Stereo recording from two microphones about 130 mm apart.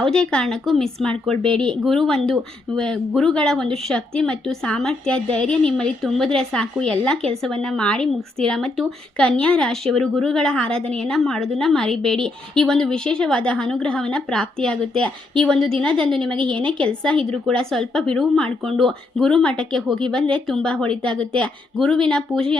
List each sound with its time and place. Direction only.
0.0 s a woman's voice: 5° left (ahead or behind)
16.6 s a woman's voice: 40° right (ahead or behind)
16.8 s a woman's voice: 5° left (ahead or behind)